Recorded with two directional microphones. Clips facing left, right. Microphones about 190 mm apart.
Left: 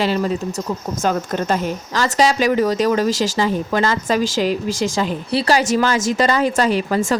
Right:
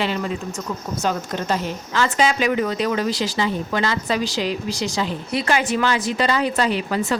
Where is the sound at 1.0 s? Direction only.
50° left (ahead or behind).